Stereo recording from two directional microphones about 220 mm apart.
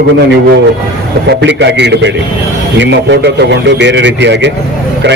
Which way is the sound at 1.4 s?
50° right (ahead or behind).